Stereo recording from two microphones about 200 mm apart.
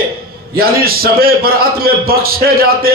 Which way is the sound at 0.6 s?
50° right (ahead or behind).